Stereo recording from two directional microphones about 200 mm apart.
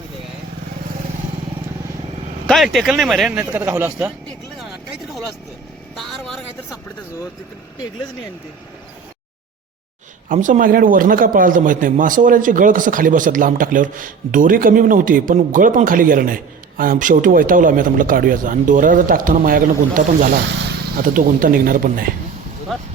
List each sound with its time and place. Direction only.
2.5 s speech: centre (ahead or behind)
6.0 s speech: centre (ahead or behind)
10.2 s a man's voice: 40° right (ahead or behind)